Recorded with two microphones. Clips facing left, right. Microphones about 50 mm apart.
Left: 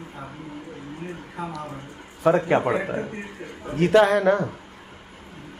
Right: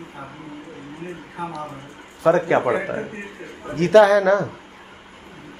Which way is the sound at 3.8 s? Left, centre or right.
Right.